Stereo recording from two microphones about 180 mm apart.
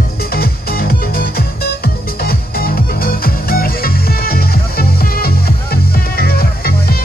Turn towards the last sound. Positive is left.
turn(degrees=55)  # may be behind; listen again after turning